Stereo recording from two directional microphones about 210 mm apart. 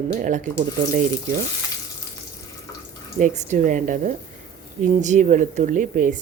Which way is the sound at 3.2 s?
35° right (ahead or behind).